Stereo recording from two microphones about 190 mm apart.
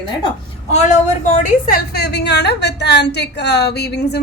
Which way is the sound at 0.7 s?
40° left (ahead or behind).